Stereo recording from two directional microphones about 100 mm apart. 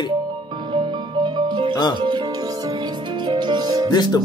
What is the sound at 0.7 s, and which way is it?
Music, 50° right (ahead or behind).